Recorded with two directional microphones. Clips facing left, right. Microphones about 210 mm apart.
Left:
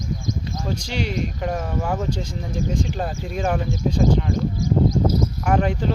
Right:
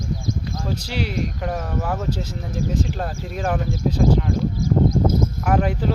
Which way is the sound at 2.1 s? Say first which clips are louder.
Even; 5° right (ahead or behind).